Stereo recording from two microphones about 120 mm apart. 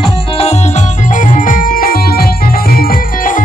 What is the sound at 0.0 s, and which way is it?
Music, 60° left (ahead or behind).